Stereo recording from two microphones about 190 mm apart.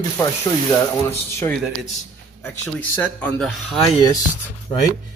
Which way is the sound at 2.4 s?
10° left (ahead or behind).